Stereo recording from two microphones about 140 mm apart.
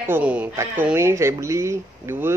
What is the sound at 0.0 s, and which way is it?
Speech, 15° right (ahead or behind).